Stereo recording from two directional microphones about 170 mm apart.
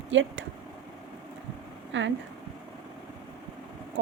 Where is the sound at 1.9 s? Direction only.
90° right.